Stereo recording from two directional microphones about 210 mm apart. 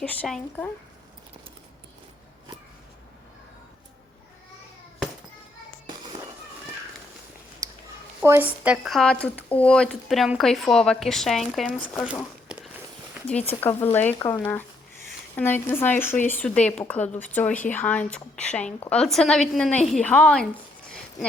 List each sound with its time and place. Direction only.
0.0 s speech: 5° left (ahead or behind)
7.6 s a sound: 15° right (ahead or behind)
8.2 s speech: 10° right (ahead or behind)
13.5 s a woman's voice: 10° left (ahead or behind)